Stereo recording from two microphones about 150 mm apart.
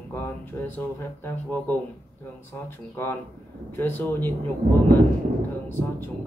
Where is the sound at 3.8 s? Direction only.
15° left (ahead or behind).